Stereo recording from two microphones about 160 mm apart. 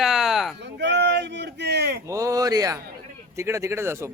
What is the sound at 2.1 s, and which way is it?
Speech, 20° right (ahead or behind).